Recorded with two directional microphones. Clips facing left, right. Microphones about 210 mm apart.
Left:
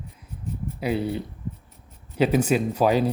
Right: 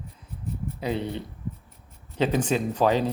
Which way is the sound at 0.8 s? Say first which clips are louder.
Left 4 dB; 10° left (ahead or behind).